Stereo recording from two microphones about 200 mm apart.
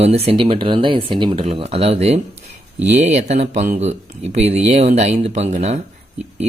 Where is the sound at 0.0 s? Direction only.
30° right (ahead or behind).